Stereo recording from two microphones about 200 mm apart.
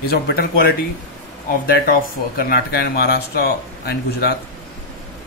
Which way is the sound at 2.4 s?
50° left (ahead or behind).